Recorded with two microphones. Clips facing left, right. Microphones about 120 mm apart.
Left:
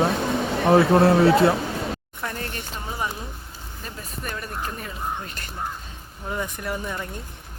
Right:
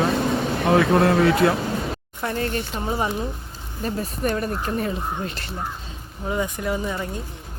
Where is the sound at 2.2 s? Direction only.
30° right (ahead or behind).